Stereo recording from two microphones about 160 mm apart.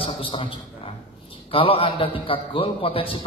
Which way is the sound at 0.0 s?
35° left (ahead or behind).